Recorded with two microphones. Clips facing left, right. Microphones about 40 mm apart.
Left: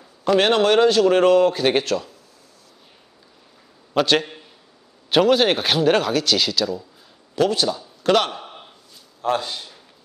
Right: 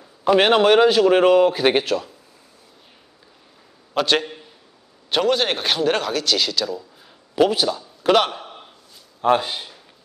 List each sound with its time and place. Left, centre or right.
0.2 s speech: centre
3.9 s a man's voice: centre
7.3 s a man's voice: centre
9.2 s speech: right